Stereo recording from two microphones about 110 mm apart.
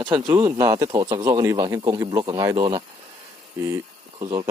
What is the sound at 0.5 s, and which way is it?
Speech, 30° right (ahead or behind).